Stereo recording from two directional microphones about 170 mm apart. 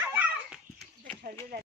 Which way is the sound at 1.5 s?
65° right (ahead or behind).